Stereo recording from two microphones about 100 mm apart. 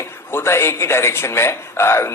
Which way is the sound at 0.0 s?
25° left (ahead or behind).